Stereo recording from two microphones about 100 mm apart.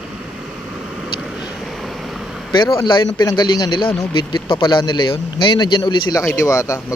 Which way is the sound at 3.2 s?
45° left (ahead or behind).